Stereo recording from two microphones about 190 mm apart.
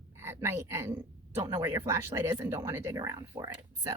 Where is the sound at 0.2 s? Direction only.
10° right (ahead or behind).